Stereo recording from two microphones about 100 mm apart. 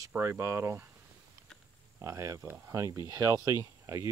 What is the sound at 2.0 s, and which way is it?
Speech, 30° right (ahead or behind).